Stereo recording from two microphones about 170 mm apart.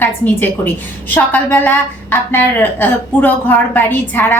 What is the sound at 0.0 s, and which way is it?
A woman's voice, 10° left (ahead or behind).